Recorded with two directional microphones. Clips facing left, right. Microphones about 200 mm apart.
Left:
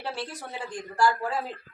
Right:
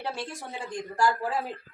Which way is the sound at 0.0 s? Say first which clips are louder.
Even; 25° right (ahead or behind).